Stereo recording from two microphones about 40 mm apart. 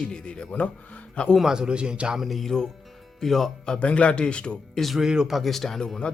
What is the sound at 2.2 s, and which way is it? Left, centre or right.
A man's voice, centre.